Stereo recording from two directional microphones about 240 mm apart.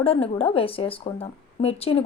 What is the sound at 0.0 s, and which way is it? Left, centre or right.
Speech, left.